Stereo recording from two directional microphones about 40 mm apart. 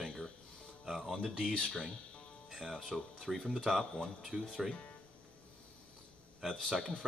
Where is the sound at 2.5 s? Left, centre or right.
Centre.